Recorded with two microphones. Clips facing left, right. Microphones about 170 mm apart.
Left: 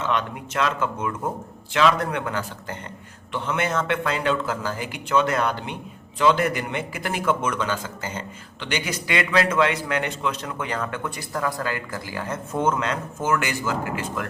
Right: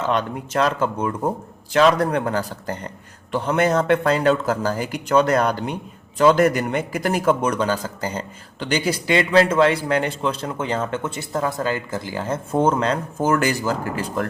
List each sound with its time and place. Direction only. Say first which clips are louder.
0.1 s a man's voice: right 4 dB; 35° right (ahead or behind)